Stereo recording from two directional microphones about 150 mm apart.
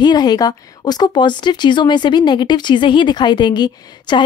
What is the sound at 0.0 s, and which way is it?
Speech, 30° left (ahead or behind).